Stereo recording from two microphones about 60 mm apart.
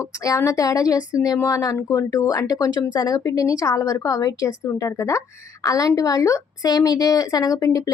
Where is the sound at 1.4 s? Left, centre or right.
Left.